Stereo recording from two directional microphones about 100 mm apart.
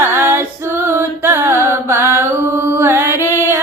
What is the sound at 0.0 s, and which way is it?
Female singing, 25° right (ahead or behind).